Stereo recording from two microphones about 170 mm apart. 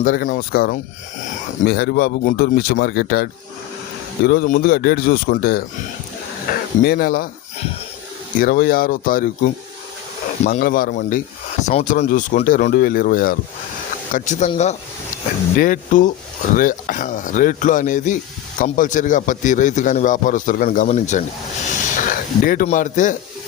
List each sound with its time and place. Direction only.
0.0 s speech: 55° left (ahead or behind)
1.6 s speech: 70° left (ahead or behind)
6.5 s snake: 60° left (ahead or behind)
6.8 s speech: 60° left (ahead or behind)
8.4 s speech: 55° left (ahead or behind)
10.4 s speech: 50° left (ahead or behind)
11.7 s a man's voice: 40° left (ahead or behind)
14.1 s a man's voice: 45° left (ahead or behind)
15.5 s a man's voice: 55° left (ahead or behind)
21.9 s a sound: 50° left (ahead or behind)
22.6 s a man's voice: 50° left (ahead or behind)